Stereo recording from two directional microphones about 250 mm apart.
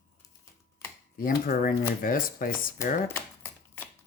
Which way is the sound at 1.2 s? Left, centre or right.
Left.